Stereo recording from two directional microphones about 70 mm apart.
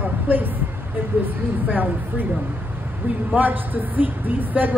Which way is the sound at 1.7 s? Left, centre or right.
Right.